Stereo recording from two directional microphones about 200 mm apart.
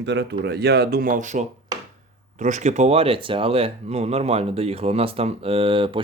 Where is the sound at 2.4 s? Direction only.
40° right (ahead or behind).